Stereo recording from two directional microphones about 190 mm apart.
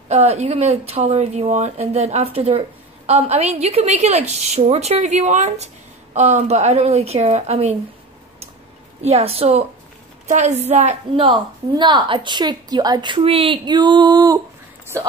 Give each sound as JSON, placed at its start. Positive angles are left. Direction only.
{"t": 0.1, "sound": "a woman's voice", "side_deg": -35}
{"t": 9.0, "sound": "a woman's voice", "side_deg": -30}